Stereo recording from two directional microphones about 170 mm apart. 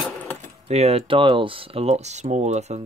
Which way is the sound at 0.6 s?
40° right (ahead or behind).